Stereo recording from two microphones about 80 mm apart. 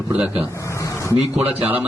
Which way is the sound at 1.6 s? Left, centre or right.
Right.